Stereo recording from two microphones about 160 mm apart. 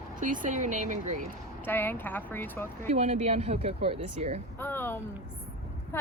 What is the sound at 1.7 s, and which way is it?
A woman's voice, 10° left (ahead or behind).